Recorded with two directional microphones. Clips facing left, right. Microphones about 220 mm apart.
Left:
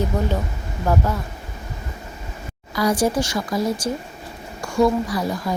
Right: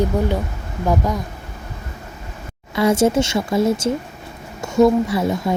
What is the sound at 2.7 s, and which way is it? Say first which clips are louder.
A woman's voice: right 4 dB; 25° right (ahead or behind).